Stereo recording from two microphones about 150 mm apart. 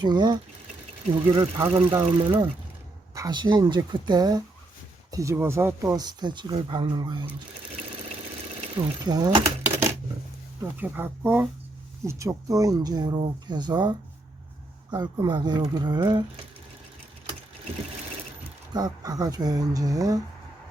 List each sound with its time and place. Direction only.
0.0 s speech: 30° right (ahead or behind)
8.8 s speech: 25° right (ahead or behind)
10.6 s speech: 15° right (ahead or behind); by 16.2 s 30° right (ahead or behind)
18.7 s speech: 25° right (ahead or behind)